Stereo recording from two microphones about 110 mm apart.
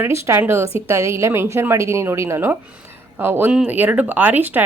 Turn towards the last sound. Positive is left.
turn(degrees=-15)  # may be behind; listen again after turning